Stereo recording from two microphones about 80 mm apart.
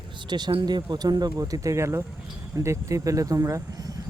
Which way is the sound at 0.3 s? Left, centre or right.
Right.